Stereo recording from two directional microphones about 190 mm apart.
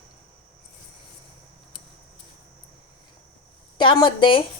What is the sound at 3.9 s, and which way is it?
Speech, 25° left (ahead or behind).